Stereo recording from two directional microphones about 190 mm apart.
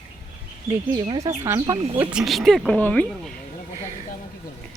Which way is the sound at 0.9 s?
20° right (ahead or behind).